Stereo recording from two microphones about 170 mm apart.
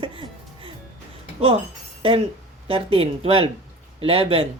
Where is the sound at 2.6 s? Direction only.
35° right (ahead or behind).